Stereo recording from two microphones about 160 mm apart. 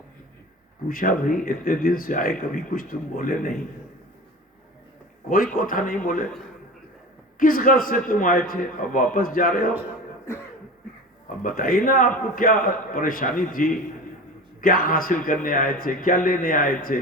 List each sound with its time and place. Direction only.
0.9 s speech: 60° left (ahead or behind)
5.3 s speech: 60° left (ahead or behind)
7.3 s speech: 60° left (ahead or behind)
11.4 s speech: 60° left (ahead or behind)